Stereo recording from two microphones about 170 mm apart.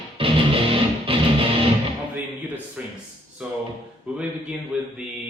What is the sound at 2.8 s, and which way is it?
Speech, 5° right (ahead or behind).